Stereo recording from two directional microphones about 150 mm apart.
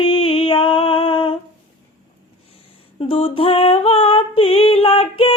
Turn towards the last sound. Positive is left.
turn(degrees=40)  # may be behind; listen again after turning